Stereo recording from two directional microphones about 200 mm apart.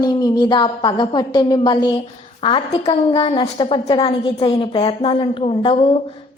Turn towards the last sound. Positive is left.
turn(degrees=30)  # may be behind; listen again after turning